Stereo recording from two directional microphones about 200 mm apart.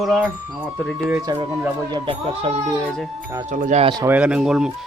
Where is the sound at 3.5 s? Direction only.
40° right (ahead or behind).